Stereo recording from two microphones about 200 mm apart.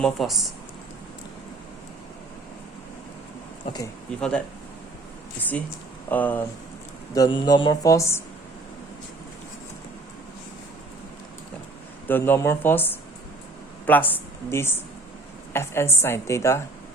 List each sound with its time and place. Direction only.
0.0 s speech: centre (ahead or behind)
4.2 s speech: 5° left (ahead or behind)
6.1 s speech: 10° left (ahead or behind)
7.1 s speech: 20° left (ahead or behind)
12.0 s speech: 10° left (ahead or behind)